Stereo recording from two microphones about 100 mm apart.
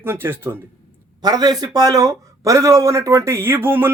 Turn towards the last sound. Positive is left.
turn(degrees=-20)  # may be behind; listen again after turning